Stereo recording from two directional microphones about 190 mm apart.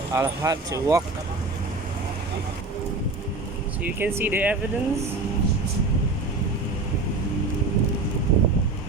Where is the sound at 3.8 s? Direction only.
10° right (ahead or behind).